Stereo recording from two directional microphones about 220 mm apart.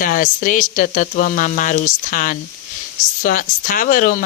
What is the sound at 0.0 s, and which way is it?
Speech, 40° left (ahead or behind).